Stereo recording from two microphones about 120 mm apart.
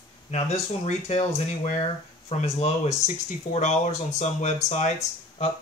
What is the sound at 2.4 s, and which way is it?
Speech, 65° left (ahead or behind).